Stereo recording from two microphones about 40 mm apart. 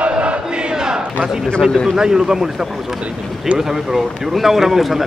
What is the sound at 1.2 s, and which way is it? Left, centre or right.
Speech, centre.